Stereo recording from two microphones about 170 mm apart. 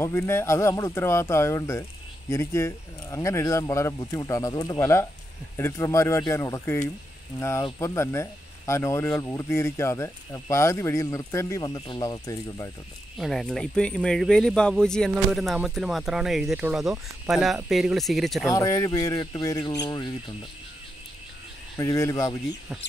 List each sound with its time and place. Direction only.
0.0 s speech: 15° left (ahead or behind)
13.2 s speech: centre (ahead or behind)
18.5 s speech: 20° left (ahead or behind)
21.7 s speech: 20° left (ahead or behind)